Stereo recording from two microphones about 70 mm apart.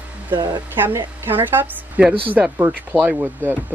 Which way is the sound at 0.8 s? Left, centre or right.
Right.